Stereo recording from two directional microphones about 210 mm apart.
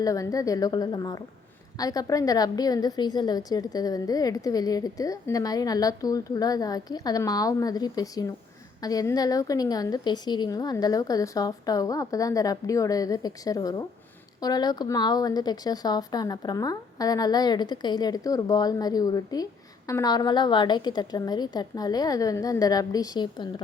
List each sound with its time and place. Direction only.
0.0 s a woman's voice: 15° left (ahead or behind)